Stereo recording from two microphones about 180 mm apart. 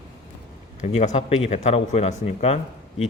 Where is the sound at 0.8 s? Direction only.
40° left (ahead or behind).